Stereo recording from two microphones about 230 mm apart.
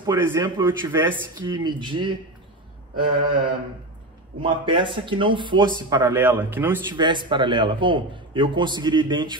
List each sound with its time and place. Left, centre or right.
0.0 s speech: centre
7.0 s speech: centre